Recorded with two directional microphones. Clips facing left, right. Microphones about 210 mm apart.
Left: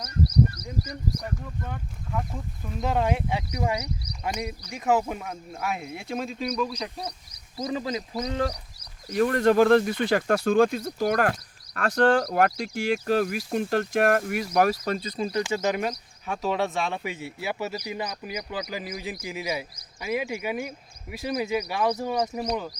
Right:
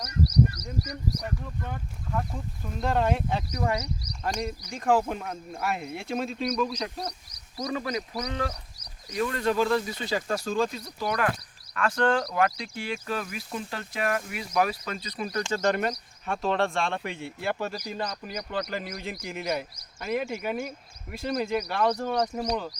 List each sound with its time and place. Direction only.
1.2 s speech: centre (ahead or behind)
7.5 s a man's voice: 20° left (ahead or behind)
9.1 s speech: 50° left (ahead or behind)
13.4 s speech: 65° left (ahead or behind); by 15.2 s 40° left (ahead or behind)
15.2 s a man's voice: 25° left (ahead or behind)
15.4 s speech: 5° left (ahead or behind)